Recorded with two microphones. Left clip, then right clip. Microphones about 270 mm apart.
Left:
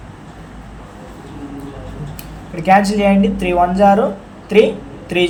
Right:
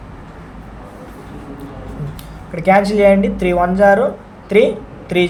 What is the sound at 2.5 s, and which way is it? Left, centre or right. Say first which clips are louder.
Speech: even; right.